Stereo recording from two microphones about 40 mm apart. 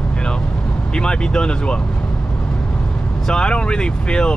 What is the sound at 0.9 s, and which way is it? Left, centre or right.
Speech, left.